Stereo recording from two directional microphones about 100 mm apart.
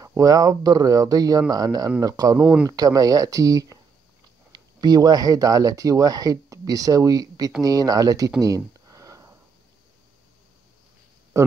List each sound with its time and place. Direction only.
0.0 s speech: 35° right (ahead or behind)
8.4 s a sound: 35° right (ahead or behind)
11.3 s speech: 30° right (ahead or behind)